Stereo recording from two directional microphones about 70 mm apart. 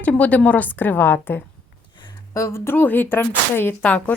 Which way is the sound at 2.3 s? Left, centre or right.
Left.